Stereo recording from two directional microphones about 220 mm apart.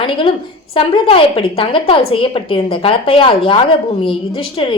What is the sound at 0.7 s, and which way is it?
A woman's voice, 25° left (ahead or behind).